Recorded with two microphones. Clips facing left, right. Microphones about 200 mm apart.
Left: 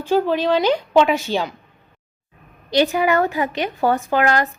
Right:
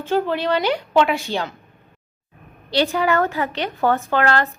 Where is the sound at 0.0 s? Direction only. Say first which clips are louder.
Left 3 dB; 15° left (ahead or behind).